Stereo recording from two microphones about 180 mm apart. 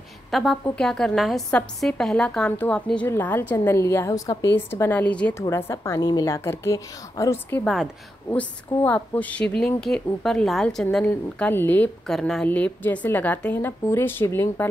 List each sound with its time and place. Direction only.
0.3 s a woman's voice: centre (ahead or behind)